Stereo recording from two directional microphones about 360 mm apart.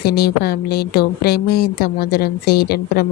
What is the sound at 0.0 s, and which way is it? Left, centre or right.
Speech, left.